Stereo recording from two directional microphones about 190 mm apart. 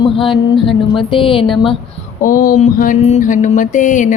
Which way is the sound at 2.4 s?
45° left (ahead or behind).